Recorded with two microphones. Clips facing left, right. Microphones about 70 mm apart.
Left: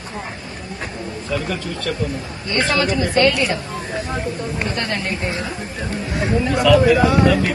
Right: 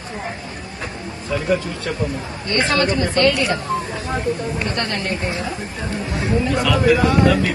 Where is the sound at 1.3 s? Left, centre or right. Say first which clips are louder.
Right 4 dB; right.